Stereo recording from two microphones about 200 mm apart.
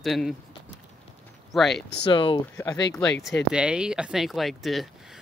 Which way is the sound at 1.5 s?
Centre (ahead or behind).